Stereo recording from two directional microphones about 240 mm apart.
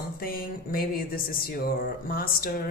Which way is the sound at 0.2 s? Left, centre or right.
Left.